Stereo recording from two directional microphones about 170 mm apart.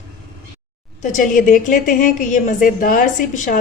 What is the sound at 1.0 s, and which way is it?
A woman's voice, 50° left (ahead or behind).